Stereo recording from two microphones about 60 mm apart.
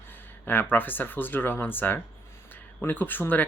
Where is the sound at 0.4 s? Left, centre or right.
Left.